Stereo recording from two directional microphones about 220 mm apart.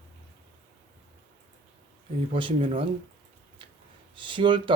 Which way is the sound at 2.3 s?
25° right (ahead or behind).